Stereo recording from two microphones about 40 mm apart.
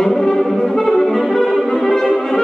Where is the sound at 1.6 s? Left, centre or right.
Centre.